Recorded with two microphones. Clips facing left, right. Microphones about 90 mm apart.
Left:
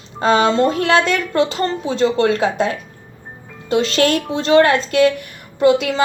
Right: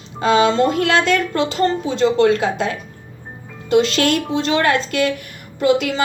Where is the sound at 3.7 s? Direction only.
35° left (ahead or behind).